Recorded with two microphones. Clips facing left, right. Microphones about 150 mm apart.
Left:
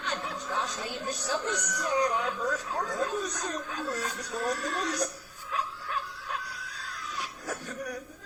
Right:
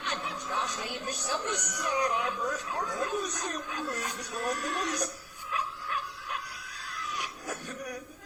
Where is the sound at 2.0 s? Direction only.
15° right (ahead or behind).